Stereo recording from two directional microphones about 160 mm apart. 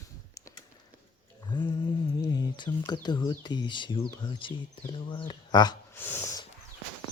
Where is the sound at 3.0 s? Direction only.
25° left (ahead or behind).